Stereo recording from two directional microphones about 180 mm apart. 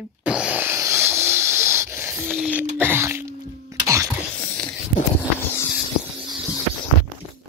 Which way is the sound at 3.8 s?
15° right (ahead or behind).